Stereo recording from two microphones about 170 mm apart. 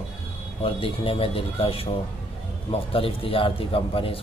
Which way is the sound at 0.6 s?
30° left (ahead or behind).